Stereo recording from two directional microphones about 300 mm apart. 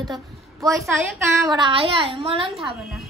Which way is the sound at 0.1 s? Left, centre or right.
Centre.